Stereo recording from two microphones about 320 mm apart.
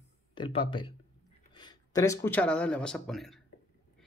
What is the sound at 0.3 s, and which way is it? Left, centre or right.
Speech, centre.